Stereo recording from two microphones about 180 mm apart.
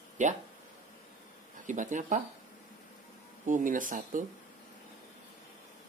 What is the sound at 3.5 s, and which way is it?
Speech, 45° right (ahead or behind).